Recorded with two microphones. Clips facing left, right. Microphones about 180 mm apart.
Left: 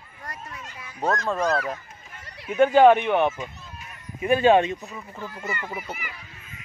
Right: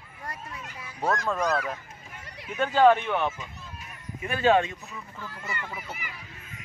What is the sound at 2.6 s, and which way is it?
Speech, 15° left (ahead or behind).